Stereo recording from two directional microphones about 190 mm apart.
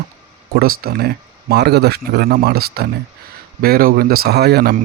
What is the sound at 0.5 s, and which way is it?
Speech, 55° right (ahead or behind).